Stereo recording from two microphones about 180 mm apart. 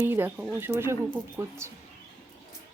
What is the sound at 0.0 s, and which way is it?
Speech, 10° right (ahead or behind).